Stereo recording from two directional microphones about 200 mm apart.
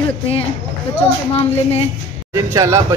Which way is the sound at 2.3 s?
15° right (ahead or behind).